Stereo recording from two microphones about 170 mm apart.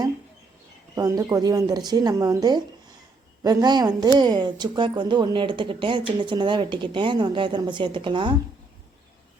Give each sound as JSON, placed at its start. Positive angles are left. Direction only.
{"t": 0.9, "sound": "a woman's voice", "side_deg": -20}